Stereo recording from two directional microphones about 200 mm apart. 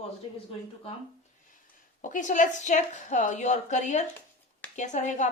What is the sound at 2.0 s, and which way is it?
Speech, 40° left (ahead or behind).